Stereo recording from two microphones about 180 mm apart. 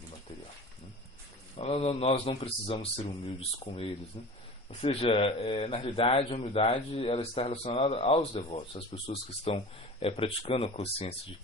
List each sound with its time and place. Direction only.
1.5 s a man's voice: 35° left (ahead or behind)